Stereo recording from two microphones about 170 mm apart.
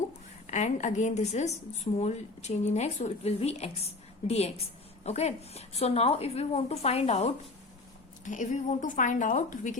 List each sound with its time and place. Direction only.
0.4 s a woman's voice: 45° left (ahead or behind)